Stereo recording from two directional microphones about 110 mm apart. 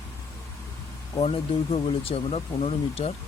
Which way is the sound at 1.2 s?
60° left (ahead or behind).